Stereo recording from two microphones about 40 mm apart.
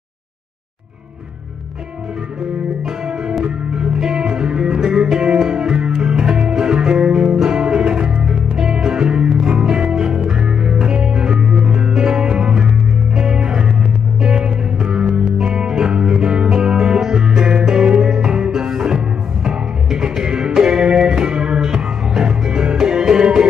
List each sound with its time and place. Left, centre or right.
3.4 s music: centre